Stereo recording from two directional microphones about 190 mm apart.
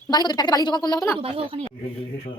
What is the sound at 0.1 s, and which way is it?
Speech, 20° left (ahead or behind).